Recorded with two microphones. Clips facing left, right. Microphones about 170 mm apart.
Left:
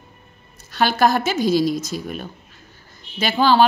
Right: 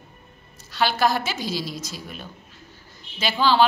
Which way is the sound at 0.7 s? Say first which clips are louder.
Left 4 dB; 50° left (ahead or behind).